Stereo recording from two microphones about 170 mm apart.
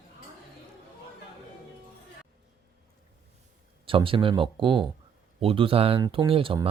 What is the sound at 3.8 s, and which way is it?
Speech, 30° right (ahead or behind).